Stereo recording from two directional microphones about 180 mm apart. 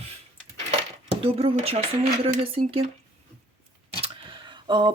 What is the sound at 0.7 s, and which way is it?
Coin, 30° right (ahead or behind).